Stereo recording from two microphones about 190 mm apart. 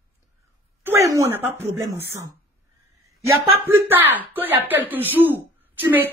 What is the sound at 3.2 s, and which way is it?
Speech, 15° right (ahead or behind).